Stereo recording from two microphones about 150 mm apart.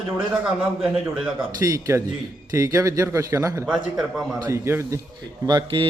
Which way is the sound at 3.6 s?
Centre (ahead or behind).